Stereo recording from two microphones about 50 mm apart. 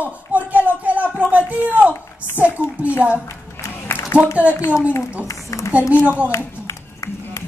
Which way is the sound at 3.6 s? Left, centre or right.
Left.